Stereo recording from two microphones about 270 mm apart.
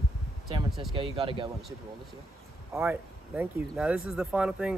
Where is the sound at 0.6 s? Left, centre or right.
Centre.